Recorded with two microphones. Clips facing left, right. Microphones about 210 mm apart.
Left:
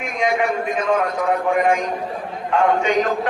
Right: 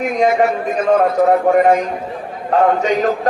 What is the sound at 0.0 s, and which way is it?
Speech, 40° right (ahead or behind).